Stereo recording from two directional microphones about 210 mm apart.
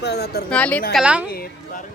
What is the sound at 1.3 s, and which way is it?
Speech, 45° left (ahead or behind).